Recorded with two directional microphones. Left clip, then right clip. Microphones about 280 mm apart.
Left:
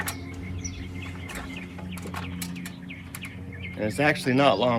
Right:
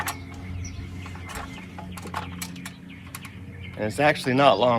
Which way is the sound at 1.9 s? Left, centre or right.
Centre.